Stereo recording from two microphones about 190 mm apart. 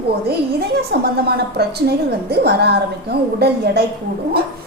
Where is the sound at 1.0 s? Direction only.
55° right (ahead or behind).